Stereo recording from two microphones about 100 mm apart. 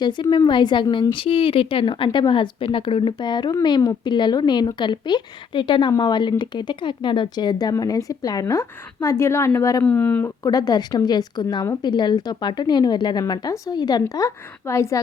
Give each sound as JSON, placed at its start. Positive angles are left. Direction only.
{"t": 0.0, "sound": "a woman's voice", "side_deg": 50}
{"t": 9.8, "sound": "speech", "side_deg": 15}
{"t": 10.4, "sound": "a woman's voice", "side_deg": 40}
{"t": 14.1, "sound": "speech", "side_deg": 30}